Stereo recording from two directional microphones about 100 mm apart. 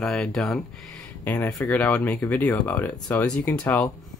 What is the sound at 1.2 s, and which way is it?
Speech, 20° left (ahead or behind).